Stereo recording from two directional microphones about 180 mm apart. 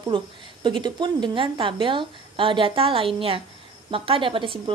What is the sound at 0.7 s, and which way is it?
A woman's voice, 25° right (ahead or behind).